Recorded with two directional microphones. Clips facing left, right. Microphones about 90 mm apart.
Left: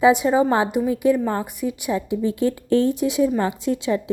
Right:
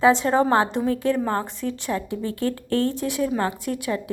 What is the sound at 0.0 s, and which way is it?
A woman's voice, 15° left (ahead or behind).